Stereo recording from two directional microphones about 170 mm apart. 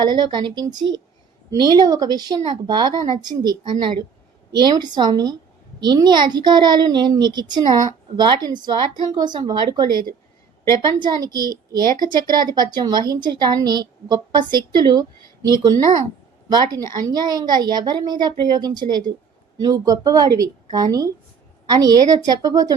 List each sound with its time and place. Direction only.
0.0 s a child's voice: 25° right (ahead or behind)
11.0 s a child's voice: 25° right (ahead or behind)